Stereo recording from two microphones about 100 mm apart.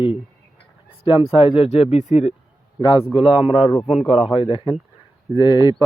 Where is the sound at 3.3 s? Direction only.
75° left (ahead or behind).